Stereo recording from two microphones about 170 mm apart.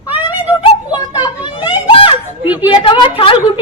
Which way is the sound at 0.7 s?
25° left (ahead or behind).